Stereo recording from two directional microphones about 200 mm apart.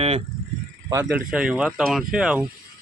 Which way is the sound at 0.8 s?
15° right (ahead or behind).